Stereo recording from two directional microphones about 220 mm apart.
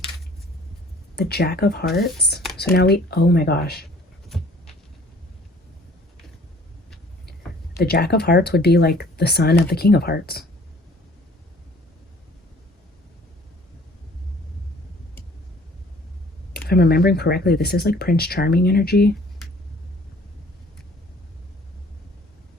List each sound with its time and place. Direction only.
1.1 s speech: 45° left (ahead or behind)
7.8 s speech: 45° left (ahead or behind)
16.5 s speech: 45° left (ahead or behind)